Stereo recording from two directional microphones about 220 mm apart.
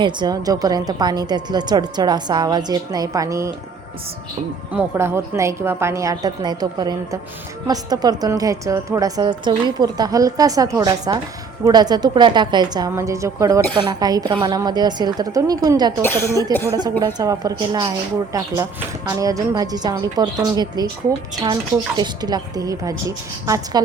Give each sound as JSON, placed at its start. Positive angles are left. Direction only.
{"t": 0.0, "sound": "speech", "side_deg": -20}
{"t": 4.7, "sound": "a woman's voice", "side_deg": -10}
{"t": 16.0, "sound": "speech", "side_deg": 10}
{"t": 17.2, "sound": "speech", "side_deg": -20}